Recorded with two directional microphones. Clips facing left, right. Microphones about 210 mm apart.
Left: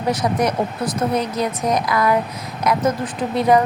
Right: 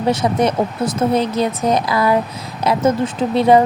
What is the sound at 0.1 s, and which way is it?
A woman's voice, 25° right (ahead or behind).